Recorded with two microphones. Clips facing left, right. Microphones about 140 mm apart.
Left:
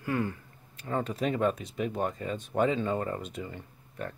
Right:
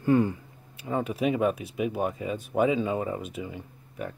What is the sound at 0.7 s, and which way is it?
Speech, 10° right (ahead or behind).